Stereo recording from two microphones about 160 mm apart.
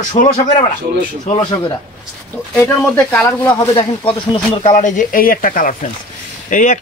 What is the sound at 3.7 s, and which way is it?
Speech, 35° left (ahead or behind).